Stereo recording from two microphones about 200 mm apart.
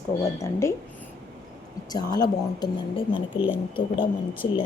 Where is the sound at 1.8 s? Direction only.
20° left (ahead or behind).